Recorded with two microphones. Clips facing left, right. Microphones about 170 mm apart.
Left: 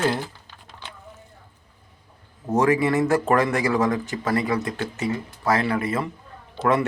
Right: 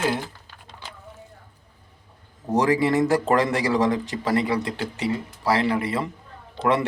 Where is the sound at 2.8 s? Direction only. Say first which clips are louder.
Even; 20° right (ahead or behind).